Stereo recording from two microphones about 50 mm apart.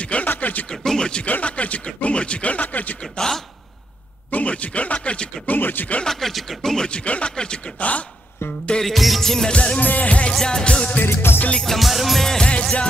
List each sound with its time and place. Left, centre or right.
0.0 s a sound: left
0.7 s speech: centre
1.2 s speech: left
3.0 s speech: centre
4.3 s speech: left
5.5 s speech: left
6.0 s speech: centre
6.7 s speech: centre
8.8 s music: centre
9.5 s speech: left
10.4 s speech: centre
11.1 s music: left
11.6 s music: centre
12.3 s music: centre